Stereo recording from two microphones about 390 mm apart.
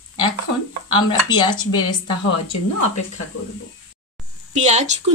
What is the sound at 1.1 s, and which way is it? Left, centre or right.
Speech, centre.